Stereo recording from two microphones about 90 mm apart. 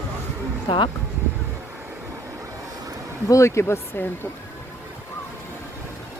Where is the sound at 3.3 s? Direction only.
30° left (ahead or behind).